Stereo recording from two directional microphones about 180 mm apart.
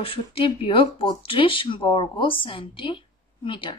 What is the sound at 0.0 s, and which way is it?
Speech, 30° left (ahead or behind).